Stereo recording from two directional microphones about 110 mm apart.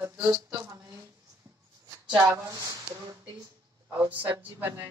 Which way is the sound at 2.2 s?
35° right (ahead or behind).